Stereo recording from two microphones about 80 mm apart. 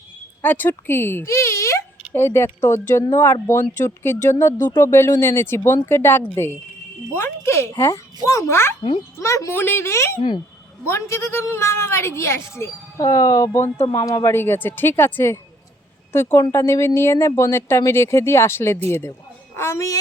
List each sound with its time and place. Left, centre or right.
0.4 s speech: left
9.6 s speech: left
13.0 s speech: left
14.3 s speech: left